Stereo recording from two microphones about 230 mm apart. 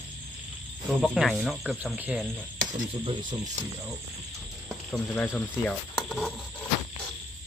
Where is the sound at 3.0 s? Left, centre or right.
Centre.